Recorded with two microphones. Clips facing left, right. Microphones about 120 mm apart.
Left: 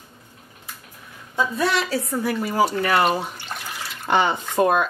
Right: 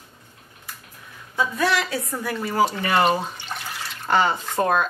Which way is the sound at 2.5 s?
5° left (ahead or behind).